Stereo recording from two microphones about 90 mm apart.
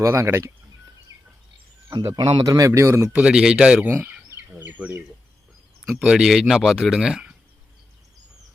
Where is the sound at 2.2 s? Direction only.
60° right (ahead or behind).